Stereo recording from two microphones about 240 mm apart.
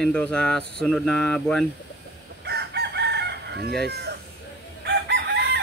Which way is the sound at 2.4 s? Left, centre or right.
Right.